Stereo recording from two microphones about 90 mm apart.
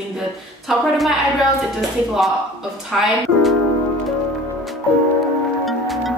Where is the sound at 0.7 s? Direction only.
Centre (ahead or behind).